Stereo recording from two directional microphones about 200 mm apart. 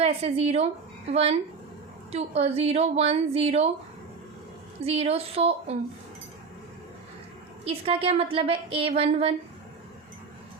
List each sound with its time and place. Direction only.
0.0 s a woman's voice: 30° right (ahead or behind)
4.8 s a woman's voice: 30° right (ahead or behind)
7.6 s a woman's voice: 25° right (ahead or behind)